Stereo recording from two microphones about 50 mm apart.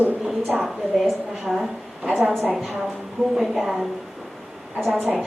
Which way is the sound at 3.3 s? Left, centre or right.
Centre.